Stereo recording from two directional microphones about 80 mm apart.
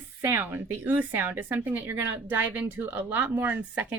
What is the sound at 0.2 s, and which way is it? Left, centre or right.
Speech, right.